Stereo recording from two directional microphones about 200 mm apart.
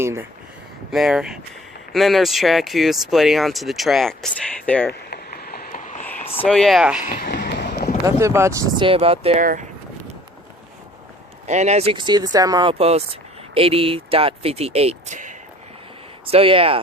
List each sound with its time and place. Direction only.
0.0 s speech: 10° right (ahead or behind)
0.9 s speech: centre (ahead or behind)
4.9 s a sound: 50° left (ahead or behind); by 6.4 s 30° left (ahead or behind)
6.4 s speech: centre (ahead or behind)
7.0 s a sound: 50° left (ahead or behind)
8.0 s speech: 15° right (ahead or behind)
8.8 s speech: 30° right (ahead or behind)
9.4 s speech: 40° right (ahead or behind)
11.4 s speech: 35° right (ahead or behind)
16.3 s speech: 25° right (ahead or behind)